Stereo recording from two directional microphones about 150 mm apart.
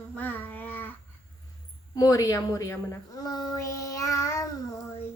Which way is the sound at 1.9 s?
25° left (ahead or behind).